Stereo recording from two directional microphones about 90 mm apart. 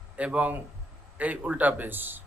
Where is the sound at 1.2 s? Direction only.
15° right (ahead or behind).